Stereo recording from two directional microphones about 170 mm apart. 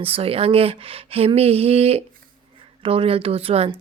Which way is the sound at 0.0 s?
35° right (ahead or behind).